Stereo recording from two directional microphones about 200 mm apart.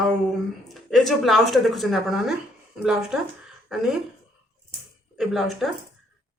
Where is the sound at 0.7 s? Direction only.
Centre (ahead or behind).